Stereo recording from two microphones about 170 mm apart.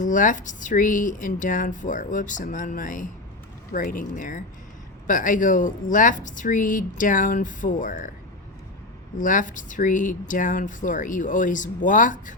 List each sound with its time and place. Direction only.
0.0 s speech: 50° left (ahead or behind)
9.1 s speech: 50° left (ahead or behind)